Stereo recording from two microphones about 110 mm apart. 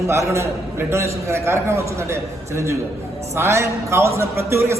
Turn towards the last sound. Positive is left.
turn(degrees=-25)  # may be behind; listen again after turning